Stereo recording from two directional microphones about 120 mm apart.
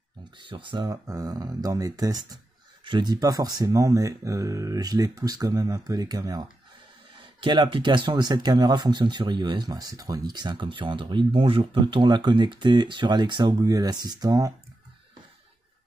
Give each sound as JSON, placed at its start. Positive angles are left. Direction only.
{"t": 0.4, "sound": "speech", "side_deg": -45}
{"t": 0.8, "sound": "speech", "side_deg": -30}
{"t": 2.8, "sound": "speech", "side_deg": -40}